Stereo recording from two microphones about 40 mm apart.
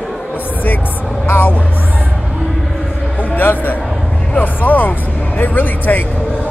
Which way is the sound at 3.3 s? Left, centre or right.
Left.